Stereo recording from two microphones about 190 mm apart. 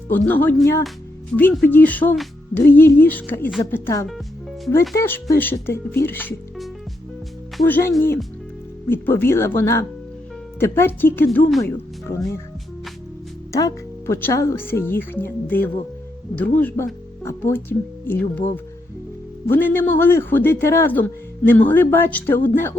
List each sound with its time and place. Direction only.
0.1 s a man's voice: 10° left (ahead or behind)
7.5 s a man's voice: 10° left (ahead or behind)
11.3 s speech: centre (ahead or behind)
11.6 s a man's voice: 15° left (ahead or behind)
13.5 s a man's voice: 15° left (ahead or behind)
19.5 s a man's voice: 10° left (ahead or behind)